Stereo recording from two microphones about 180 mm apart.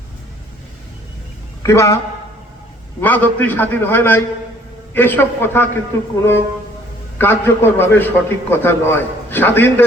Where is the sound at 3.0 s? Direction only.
10° left (ahead or behind).